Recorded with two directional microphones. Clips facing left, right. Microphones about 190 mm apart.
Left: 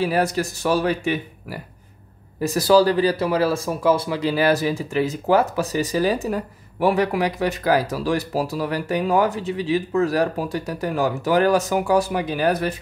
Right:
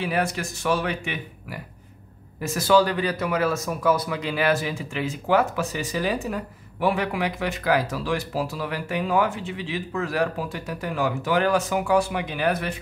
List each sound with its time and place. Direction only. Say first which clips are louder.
0.0 s speech: left 5 dB; 40° left (ahead or behind)